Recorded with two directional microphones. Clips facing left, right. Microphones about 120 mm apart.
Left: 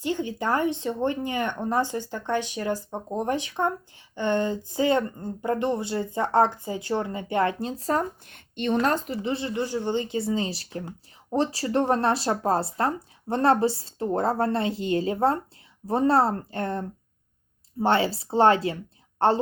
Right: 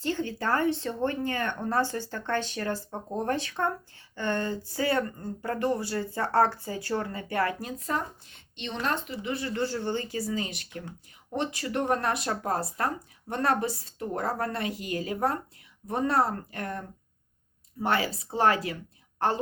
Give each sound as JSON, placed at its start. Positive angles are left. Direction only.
{"t": 0.0, "sound": "speech", "side_deg": 15}
{"t": 8.3, "sound": "a woman's voice", "side_deg": 55}
{"t": 9.2, "sound": "speech", "side_deg": 30}
{"t": 9.5, "sound": "a woman's voice", "side_deg": 15}